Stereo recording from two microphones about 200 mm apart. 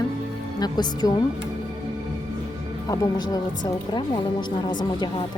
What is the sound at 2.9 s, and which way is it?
Speech, 20° left (ahead or behind).